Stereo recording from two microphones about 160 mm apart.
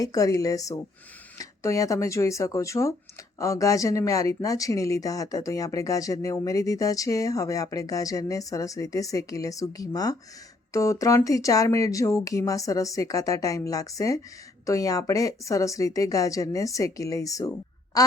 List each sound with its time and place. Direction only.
0.0 s speech: 20° left (ahead or behind)
17.9 s quack: 25° left (ahead or behind)